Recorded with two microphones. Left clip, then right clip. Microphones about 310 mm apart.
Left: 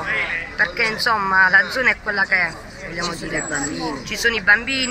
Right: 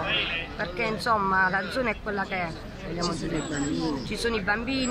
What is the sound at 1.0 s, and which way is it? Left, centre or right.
A woman's voice, centre.